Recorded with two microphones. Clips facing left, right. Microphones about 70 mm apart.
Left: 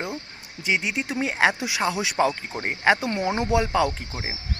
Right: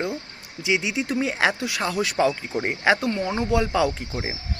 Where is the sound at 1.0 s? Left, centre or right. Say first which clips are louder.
Left 2 dB; centre.